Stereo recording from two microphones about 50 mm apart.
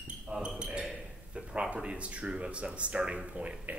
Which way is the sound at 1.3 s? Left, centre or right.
Right.